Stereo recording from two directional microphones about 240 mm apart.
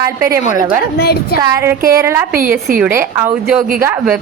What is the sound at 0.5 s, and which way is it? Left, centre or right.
Speech, centre.